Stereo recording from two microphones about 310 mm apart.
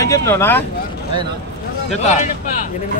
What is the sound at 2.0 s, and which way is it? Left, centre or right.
Speech, left.